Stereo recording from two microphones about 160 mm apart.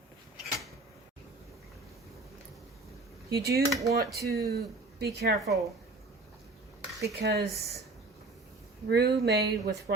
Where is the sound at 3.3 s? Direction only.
85° right.